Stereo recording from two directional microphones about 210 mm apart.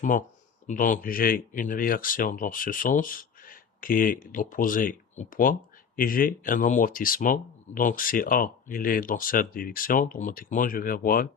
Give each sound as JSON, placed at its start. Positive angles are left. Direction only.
{"t": 0.0, "sound": "speech", "side_deg": 40}